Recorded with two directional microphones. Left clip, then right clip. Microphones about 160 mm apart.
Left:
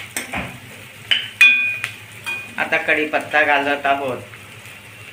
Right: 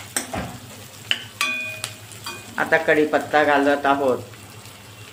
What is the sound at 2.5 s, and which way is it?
Speech, 65° right (ahead or behind).